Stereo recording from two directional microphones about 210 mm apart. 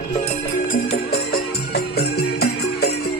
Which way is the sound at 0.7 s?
45° left (ahead or behind).